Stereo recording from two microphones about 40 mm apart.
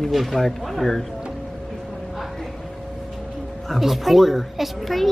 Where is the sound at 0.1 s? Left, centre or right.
Centre.